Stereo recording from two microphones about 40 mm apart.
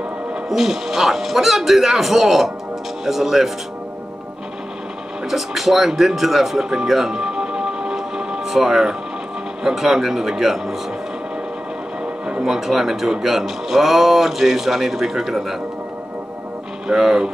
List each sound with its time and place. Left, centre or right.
0.5 s speech: centre
5.3 s speech: centre
7.2 s music: centre
8.5 s speech: centre
12.4 s speech: centre
16.8 s speech: centre